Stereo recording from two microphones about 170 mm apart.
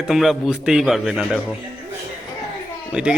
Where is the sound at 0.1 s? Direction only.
Centre (ahead or behind).